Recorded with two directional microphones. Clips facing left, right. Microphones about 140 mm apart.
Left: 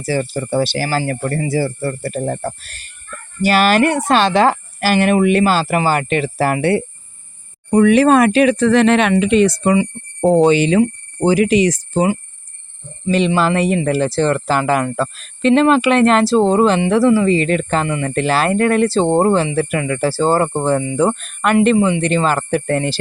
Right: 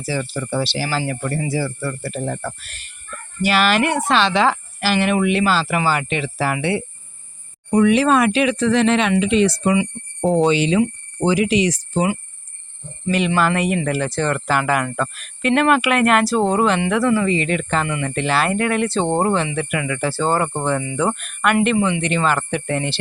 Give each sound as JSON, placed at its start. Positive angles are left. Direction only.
{"t": 0.0, "sound": "speech", "side_deg": 45}
{"t": 13.1, "sound": "speech", "side_deg": 30}